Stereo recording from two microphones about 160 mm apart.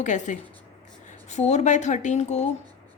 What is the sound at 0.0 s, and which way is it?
A woman's voice, 50° left (ahead or behind).